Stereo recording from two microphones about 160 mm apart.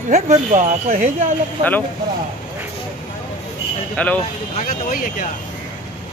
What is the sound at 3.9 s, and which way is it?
Speech, 10° left (ahead or behind).